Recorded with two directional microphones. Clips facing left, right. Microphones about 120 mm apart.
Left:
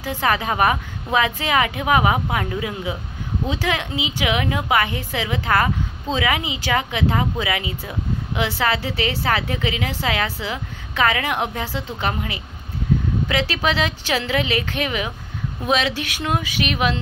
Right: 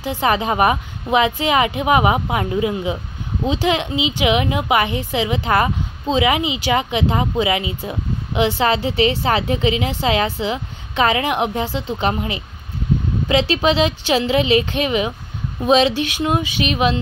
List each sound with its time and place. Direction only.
0.0 s a woman's voice: 15° right (ahead or behind)